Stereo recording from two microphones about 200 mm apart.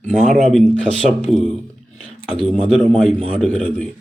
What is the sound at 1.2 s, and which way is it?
Speech, 5° left (ahead or behind).